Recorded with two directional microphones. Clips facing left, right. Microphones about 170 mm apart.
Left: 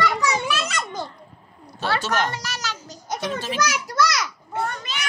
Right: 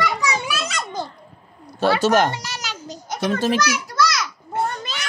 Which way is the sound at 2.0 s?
45° right (ahead or behind).